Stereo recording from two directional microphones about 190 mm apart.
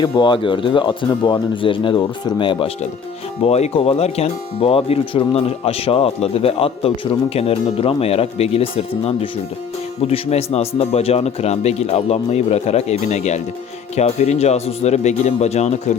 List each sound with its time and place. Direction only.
0.0 s speech: 25° left (ahead or behind)
10.0 s speech: 35° left (ahead or behind)